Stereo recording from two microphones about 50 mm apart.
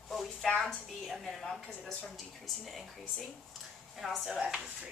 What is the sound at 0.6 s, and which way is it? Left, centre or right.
A woman's voice, centre.